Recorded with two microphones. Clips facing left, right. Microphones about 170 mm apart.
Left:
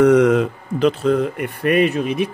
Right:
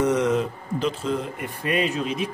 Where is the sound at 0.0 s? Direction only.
65° left (ahead or behind).